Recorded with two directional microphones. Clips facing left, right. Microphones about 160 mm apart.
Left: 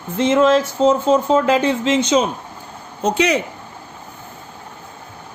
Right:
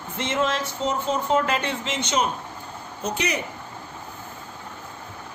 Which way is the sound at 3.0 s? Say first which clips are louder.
Left 10 dB; 90° left.